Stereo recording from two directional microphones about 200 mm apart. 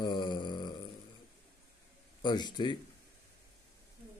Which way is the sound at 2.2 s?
20° left (ahead or behind).